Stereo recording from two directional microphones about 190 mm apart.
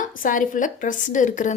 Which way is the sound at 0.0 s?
45° left (ahead or behind).